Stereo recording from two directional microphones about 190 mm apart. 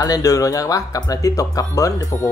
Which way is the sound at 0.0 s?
20° left (ahead or behind).